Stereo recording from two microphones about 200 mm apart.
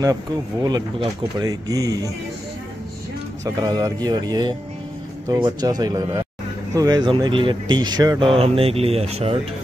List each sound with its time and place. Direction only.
0.0 s speech: 20° right (ahead or behind)
3.4 s speech: 20° right (ahead or behind)